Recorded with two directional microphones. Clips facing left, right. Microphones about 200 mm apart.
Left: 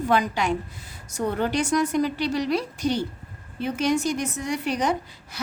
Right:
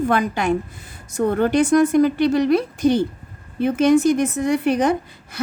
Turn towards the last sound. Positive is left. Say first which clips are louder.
# right 5 dB
turn(degrees=-55)  # may be behind; listen again after turning